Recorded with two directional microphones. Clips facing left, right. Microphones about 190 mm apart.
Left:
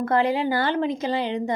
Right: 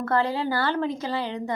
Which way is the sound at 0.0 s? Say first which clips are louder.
Left 3 dB; 15° left (ahead or behind).